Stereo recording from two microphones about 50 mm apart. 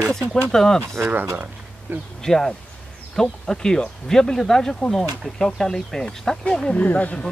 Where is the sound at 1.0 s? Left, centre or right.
Right.